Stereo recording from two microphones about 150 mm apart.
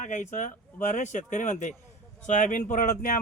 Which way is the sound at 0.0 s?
55° left (ahead or behind).